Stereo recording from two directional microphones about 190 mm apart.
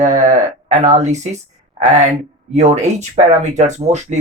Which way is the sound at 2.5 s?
35° right (ahead or behind).